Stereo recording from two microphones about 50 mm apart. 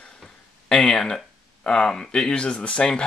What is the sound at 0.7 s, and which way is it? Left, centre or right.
Speech, centre.